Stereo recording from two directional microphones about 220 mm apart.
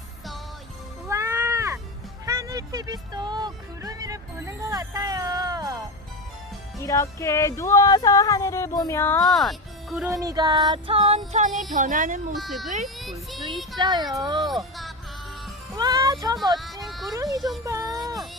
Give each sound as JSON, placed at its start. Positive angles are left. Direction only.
{"t": 1.0, "sound": "cat", "side_deg": -15}
{"t": 2.2, "sound": "music", "side_deg": -15}
{"t": 6.7, "sound": "music", "side_deg": 15}
{"t": 9.2, "sound": "speech", "side_deg": 0}
{"t": 10.1, "sound": "music", "side_deg": -15}
{"t": 11.3, "sound": "speech", "side_deg": -35}
{"t": 12.3, "sound": "speech", "side_deg": 0}
{"t": 13.7, "sound": "music", "side_deg": -20}
{"t": 14.4, "sound": "speech", "side_deg": 0}
{"t": 15.7, "sound": "music", "side_deg": -15}
{"t": 16.8, "sound": "a sound", "side_deg": 0}
{"t": 17.7, "sound": "a sound", "side_deg": -15}